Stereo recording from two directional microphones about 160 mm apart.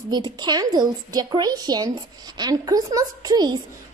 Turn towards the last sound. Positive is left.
turn(degrees=-25)  # may be behind; listen again after turning